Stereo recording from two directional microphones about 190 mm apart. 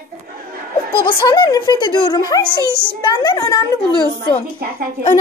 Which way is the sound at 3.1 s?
20° left (ahead or behind).